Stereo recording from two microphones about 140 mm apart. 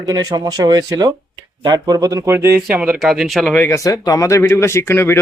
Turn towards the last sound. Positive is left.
turn(degrees=15)  # may be behind; listen again after turning